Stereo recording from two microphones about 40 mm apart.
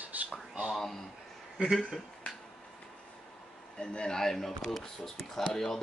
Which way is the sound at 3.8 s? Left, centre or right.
Left.